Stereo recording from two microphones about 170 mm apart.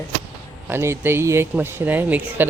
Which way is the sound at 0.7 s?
15° right (ahead or behind).